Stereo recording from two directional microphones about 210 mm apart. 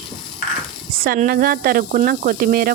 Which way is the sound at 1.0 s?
45° right (ahead or behind).